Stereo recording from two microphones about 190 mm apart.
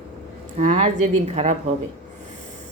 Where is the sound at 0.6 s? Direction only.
40° right (ahead or behind).